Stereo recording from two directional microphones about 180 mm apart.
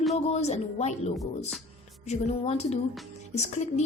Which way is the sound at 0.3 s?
35° left (ahead or behind).